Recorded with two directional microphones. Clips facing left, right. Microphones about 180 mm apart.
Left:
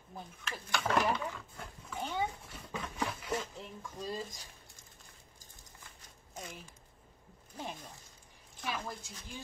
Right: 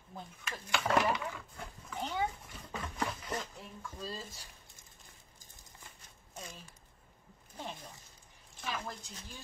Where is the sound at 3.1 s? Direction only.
10° left (ahead or behind).